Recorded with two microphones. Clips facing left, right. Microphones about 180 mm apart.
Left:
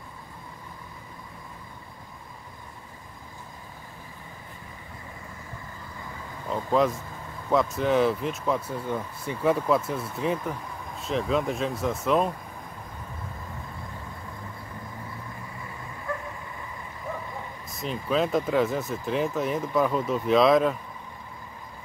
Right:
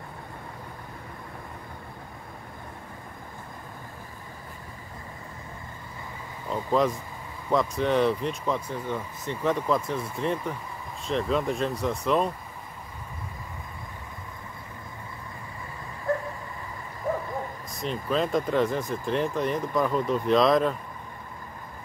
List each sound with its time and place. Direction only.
6.5 s speech: centre (ahead or behind)
17.1 s a sound: 45° right (ahead or behind)
17.7 s speech: centre (ahead or behind)